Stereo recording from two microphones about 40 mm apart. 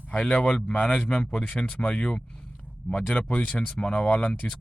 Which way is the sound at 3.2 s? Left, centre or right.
Left.